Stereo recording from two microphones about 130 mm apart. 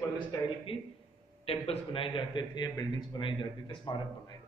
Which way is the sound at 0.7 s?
45° left (ahead or behind).